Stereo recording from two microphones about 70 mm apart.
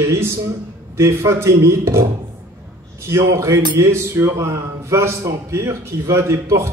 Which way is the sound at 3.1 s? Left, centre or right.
Right.